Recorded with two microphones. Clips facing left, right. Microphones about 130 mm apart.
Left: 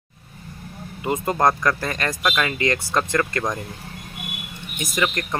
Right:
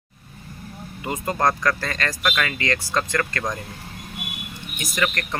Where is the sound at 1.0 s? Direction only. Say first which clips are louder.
Left 3 dB; 25° left (ahead or behind).